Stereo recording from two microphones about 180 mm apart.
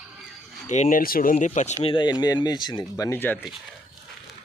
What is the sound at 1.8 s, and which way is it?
Speech, 25° left (ahead or behind).